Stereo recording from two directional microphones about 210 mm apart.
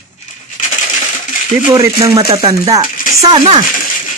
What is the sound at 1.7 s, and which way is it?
Speech, 15° right (ahead or behind).